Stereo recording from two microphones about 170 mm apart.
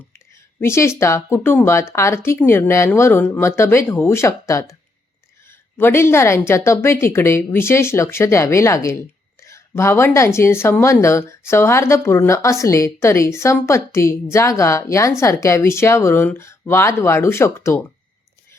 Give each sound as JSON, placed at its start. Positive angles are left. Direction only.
{"t": 0.1, "sound": "a woman's voice", "side_deg": 15}